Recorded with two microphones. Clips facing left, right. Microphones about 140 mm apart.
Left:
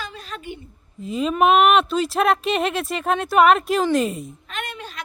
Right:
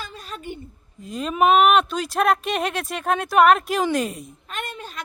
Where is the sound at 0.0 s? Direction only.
45° right (ahead or behind).